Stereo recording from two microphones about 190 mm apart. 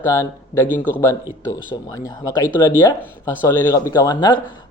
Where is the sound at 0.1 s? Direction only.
15° left (ahead or behind).